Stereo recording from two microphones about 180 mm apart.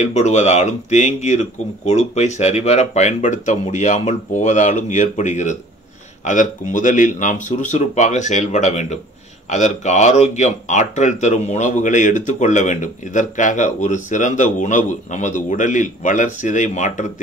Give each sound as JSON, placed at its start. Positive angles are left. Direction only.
{"t": 0.0, "sound": "speech", "side_deg": 40}